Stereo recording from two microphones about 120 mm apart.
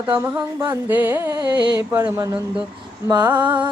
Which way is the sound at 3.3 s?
40° right (ahead or behind).